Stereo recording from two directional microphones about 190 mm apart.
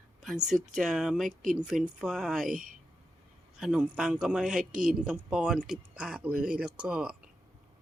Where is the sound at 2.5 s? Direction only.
45° right (ahead or behind).